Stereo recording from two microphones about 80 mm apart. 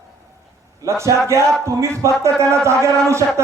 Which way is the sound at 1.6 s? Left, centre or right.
Right.